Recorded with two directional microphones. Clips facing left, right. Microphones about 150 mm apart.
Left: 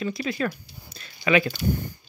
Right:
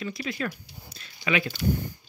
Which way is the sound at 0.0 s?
35° left (ahead or behind).